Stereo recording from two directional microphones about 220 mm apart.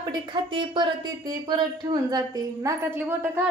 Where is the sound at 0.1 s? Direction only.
20° right (ahead or behind).